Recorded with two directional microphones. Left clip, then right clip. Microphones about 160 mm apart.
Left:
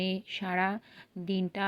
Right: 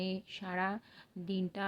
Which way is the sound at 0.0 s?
20° left (ahead or behind).